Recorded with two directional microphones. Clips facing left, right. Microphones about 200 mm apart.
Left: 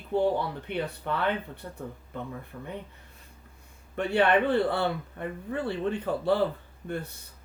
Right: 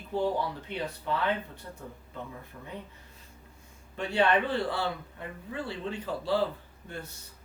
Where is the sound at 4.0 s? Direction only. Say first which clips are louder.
Left 3 dB; 60° left (ahead or behind).